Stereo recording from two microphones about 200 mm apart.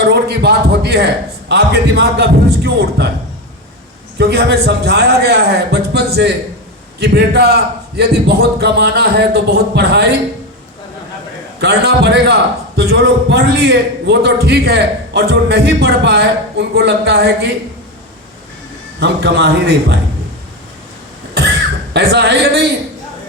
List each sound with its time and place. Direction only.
0.0 s a man's voice: 55° right (ahead or behind)
4.2 s a man's voice: 55° right (ahead or behind)
11.6 s a man's voice: 55° right (ahead or behind)
18.9 s a man's voice: 55° right (ahead or behind)
21.9 s a man's voice: 55° right (ahead or behind)